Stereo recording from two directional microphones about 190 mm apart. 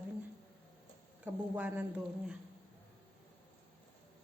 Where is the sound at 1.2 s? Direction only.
5° right (ahead or behind).